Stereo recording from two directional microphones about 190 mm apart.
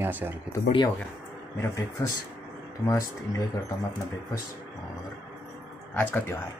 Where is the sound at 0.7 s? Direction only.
25° left (ahead or behind).